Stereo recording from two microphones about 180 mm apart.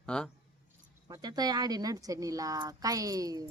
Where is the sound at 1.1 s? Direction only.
20° right (ahead or behind).